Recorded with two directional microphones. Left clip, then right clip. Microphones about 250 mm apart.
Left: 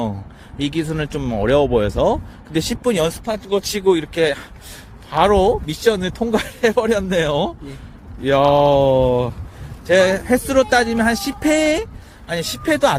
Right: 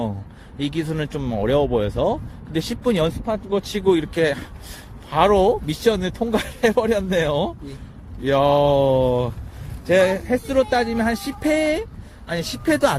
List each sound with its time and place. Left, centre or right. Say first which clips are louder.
0.6 s speech: left 3 dB; centre
3.2 s speech: left 2 dB; left
3.8 s speech: left 2 dB; centre